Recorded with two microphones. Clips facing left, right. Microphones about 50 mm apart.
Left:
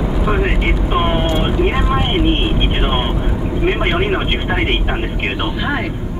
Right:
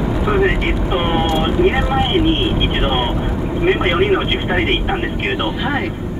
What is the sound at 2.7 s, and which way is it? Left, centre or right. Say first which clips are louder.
Vehicle: right 1 dB; centre.